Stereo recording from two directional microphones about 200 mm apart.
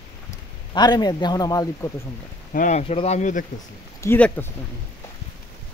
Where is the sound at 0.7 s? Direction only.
20° left (ahead or behind).